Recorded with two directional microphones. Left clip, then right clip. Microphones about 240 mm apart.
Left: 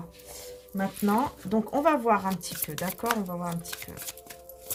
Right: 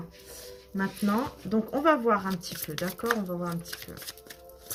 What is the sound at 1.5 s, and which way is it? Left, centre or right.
Speech, left.